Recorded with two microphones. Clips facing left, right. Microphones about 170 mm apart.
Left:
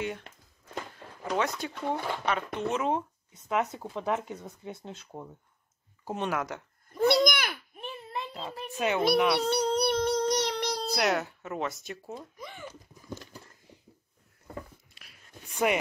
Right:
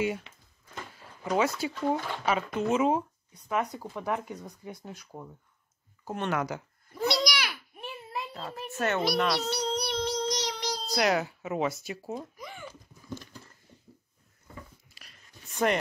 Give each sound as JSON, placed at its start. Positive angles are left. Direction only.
{"t": 1.3, "sound": "speech", "side_deg": -5}
{"t": 3.3, "sound": "speech", "side_deg": 20}
{"t": 6.0, "sound": "speech", "side_deg": 10}
{"t": 7.1, "sound": "babbling", "side_deg": 50}
{"t": 7.8, "sound": "a sound", "side_deg": -5}
{"t": 8.5, "sound": "a child's voice", "side_deg": 10}
{"t": 9.4, "sound": "child singing", "side_deg": 55}
{"t": 10.9, "sound": "speech", "side_deg": 0}
{"t": 15.0, "sound": "a sound", "side_deg": 5}